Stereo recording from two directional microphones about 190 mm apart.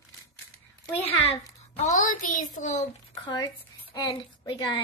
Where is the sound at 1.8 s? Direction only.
40° left (ahead or behind).